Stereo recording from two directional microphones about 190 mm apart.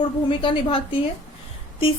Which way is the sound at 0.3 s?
25° left (ahead or behind).